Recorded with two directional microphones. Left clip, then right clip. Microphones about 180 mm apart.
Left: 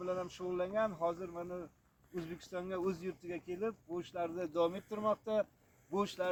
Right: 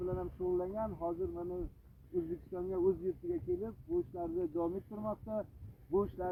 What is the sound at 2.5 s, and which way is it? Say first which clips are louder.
Speech: right 2 dB; 45° left (ahead or behind).